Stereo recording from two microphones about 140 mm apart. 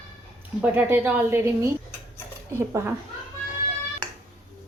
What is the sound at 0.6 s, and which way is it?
A woman's voice, 15° right (ahead or behind).